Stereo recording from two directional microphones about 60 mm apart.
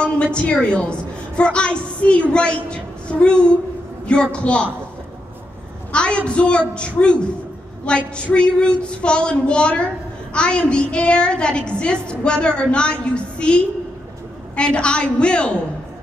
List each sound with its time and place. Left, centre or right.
0.0 s a woman's voice: centre
5.9 s a woman's voice: centre